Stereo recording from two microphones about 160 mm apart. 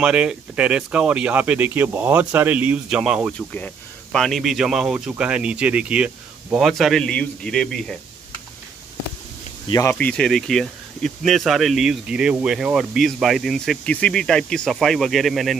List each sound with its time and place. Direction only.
0.0 s speech: 5° right (ahead or behind)
3.3 s speech: 5° left (ahead or behind)
9.7 s speech: 20° left (ahead or behind)
9.9 s speech: 5° left (ahead or behind)